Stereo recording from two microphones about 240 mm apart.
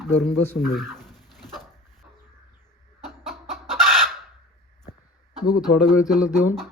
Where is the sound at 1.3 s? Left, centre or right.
Centre.